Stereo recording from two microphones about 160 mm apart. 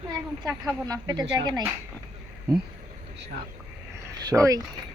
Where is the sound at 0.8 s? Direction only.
25° right (ahead or behind).